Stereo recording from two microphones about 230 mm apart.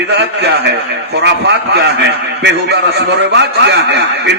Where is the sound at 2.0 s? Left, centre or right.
Right.